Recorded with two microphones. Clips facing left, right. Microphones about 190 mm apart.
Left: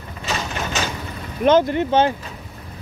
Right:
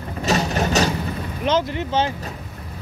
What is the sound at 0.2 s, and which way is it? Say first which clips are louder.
Mechanisms: right 6 dB; 40° right (ahead or behind).